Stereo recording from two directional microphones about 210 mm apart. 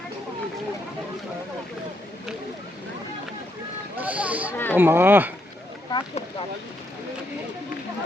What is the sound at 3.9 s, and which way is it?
Speech, 5° right (ahead or behind).